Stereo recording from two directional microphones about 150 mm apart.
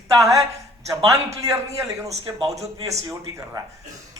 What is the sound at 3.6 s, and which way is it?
Speech, 25° right (ahead or behind).